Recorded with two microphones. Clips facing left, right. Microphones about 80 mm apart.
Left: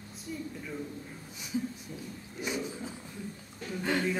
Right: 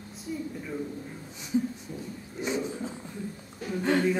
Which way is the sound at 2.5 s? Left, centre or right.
Right.